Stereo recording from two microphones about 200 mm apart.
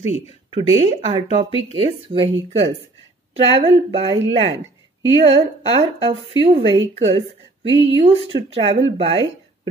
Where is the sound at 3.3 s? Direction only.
30° right (ahead or behind).